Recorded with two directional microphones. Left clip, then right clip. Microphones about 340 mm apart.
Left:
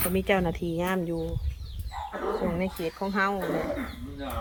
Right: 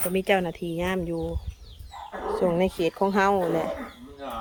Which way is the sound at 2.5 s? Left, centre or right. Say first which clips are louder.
Right 7 dB; centre.